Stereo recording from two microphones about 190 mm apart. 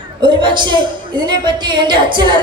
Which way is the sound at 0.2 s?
25° right (ahead or behind).